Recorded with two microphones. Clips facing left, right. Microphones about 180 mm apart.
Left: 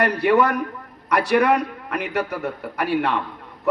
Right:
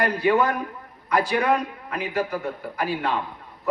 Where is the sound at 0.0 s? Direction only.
70° left (ahead or behind).